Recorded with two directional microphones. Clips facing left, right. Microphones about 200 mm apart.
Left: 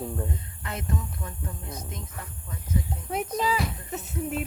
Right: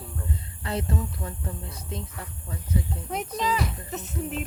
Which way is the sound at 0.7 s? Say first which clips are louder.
Right 4 dB; 30° right (ahead or behind).